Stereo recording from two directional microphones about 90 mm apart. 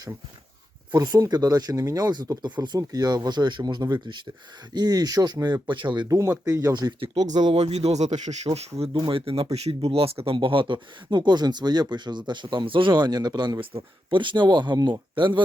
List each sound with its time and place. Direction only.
0.9 s speech: 45° right (ahead or behind)
6.1 s speech: 35° right (ahead or behind); by 7.5 s 55° right (ahead or behind)
8.4 s speech: 75° right (ahead or behind); by 13.7 s 55° right (ahead or behind)
13.7 s speech: 65° right (ahead or behind); by 15.0 s 50° right (ahead or behind)
15.1 s speech: 65° right (ahead or behind)